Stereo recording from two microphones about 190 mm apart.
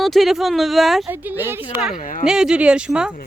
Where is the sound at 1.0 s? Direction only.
10° right (ahead or behind).